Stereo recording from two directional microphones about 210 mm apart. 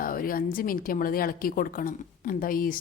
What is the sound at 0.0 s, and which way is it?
A woman's voice, 45° left (ahead or behind).